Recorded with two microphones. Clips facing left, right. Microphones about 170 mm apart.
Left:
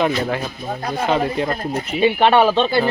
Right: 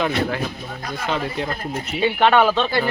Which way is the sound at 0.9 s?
30° left (ahead or behind).